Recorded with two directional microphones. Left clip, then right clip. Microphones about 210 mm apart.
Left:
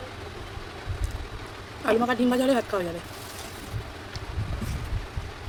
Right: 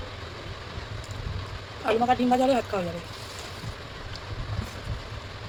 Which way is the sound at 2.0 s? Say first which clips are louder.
Right 2 dB; 20° left (ahead or behind).